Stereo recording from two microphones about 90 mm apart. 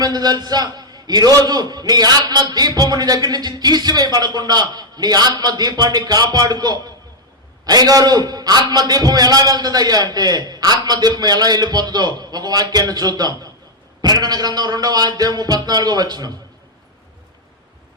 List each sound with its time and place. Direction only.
0.0 s a man's voice: 50° right (ahead or behind)